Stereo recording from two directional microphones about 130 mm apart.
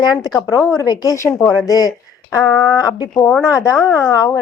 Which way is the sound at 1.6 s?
25° left (ahead or behind).